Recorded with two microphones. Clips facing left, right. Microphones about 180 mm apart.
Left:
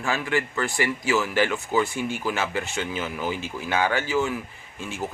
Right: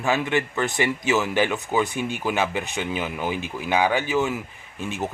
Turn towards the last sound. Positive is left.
turn(degrees=-20)  # may be behind; listen again after turning